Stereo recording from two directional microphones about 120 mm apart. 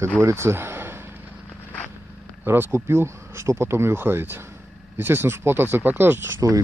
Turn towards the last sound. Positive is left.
turn(degrees=-25)  # may be behind; listen again after turning